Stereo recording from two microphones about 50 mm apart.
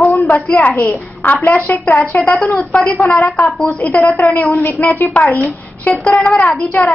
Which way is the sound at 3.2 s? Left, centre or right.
Left.